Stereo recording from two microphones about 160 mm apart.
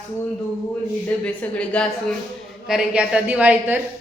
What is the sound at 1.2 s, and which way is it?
Speech, 5° left (ahead or behind).